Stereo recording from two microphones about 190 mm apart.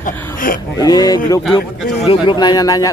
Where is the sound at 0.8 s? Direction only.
20° left (ahead or behind).